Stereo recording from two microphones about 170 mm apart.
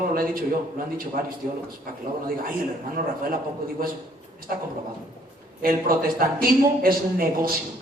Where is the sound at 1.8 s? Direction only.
55° right (ahead or behind).